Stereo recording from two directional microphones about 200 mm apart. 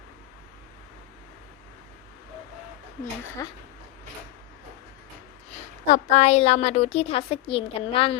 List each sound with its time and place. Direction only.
3.4 s a woman's voice: 15° left (ahead or behind)
5.9 s a woman's voice: 35° left (ahead or behind)